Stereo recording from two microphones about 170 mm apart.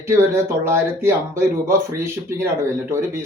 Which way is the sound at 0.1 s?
15° right (ahead or behind).